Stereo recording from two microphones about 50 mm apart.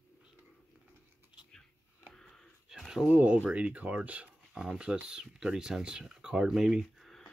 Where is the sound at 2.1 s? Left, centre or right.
Centre.